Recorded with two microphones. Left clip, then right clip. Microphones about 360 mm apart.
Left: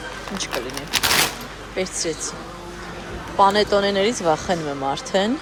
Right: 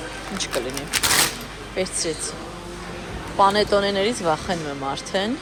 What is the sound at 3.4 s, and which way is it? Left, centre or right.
Speech, centre.